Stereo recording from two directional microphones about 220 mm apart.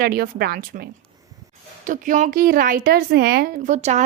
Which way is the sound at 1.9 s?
35° right (ahead or behind).